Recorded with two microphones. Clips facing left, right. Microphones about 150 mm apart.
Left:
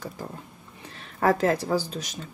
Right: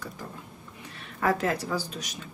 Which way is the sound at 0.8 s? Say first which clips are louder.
Left 4 dB; 35° left (ahead or behind).